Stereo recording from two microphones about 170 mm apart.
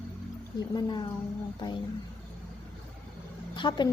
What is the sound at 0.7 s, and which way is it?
A woman's voice, 25° left (ahead or behind).